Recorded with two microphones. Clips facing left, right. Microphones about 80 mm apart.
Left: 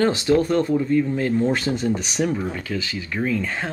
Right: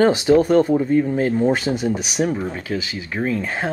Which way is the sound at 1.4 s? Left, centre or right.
Centre.